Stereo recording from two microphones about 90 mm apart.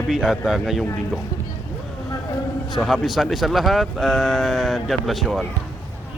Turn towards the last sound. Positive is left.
turn(degrees=0)  # may be behind; listen again after turning